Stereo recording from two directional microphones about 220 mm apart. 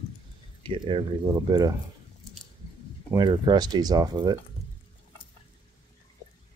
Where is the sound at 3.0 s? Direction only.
20° right (ahead or behind).